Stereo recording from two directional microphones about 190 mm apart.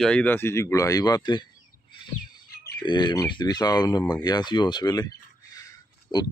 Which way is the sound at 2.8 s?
25° left (ahead or behind).